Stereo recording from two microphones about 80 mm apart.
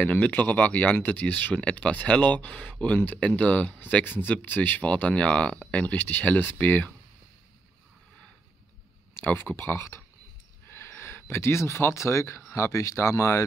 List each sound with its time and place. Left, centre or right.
0.0 s speech: left
9.2 s speech: left